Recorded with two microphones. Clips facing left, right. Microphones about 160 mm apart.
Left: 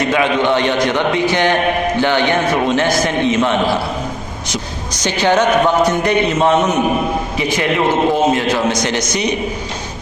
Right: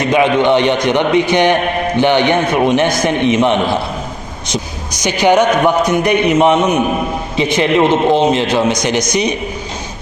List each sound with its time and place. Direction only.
0.1 s a man's voice: 20° right (ahead or behind)
5.0 s a man's voice: 15° right (ahead or behind)